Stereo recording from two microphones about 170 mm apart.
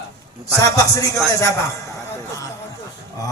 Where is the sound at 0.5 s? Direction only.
20° left (ahead or behind).